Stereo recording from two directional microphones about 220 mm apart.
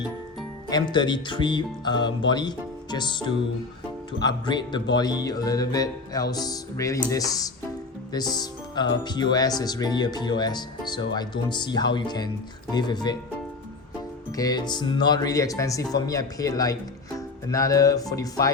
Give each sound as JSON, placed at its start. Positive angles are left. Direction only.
{"t": 0.7, "sound": "speech", "side_deg": 20}
{"t": 14.3, "sound": "speech", "side_deg": 15}